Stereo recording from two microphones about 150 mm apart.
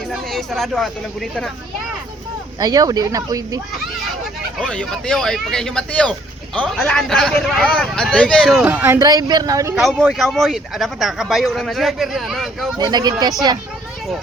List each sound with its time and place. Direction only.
0.1 s speech: centre (ahead or behind)
2.6 s speech: 25° right (ahead or behind)
4.2 s speech: centre (ahead or behind)
8.5 s speech: 10° right (ahead or behind)
9.8 s speech: centre (ahead or behind)
12.7 s speech: 25° right (ahead or behind)